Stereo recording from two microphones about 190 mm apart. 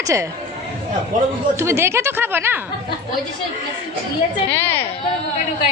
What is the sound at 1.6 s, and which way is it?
Speech, 15° right (ahead or behind).